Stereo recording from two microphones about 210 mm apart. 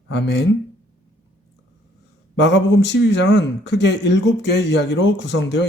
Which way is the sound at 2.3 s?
55° left (ahead or behind).